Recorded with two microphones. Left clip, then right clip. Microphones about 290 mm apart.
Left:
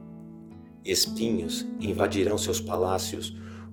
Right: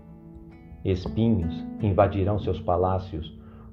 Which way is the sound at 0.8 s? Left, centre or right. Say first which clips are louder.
Left 1 dB; left.